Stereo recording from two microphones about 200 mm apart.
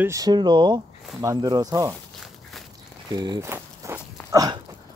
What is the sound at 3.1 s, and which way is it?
Walk, 20° right (ahead or behind).